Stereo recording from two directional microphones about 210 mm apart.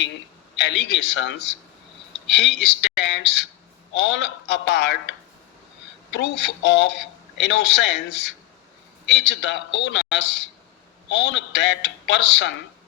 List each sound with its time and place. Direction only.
0.6 s a man's voice: 60° left (ahead or behind)
6.1 s a man's voice: 60° left (ahead or behind)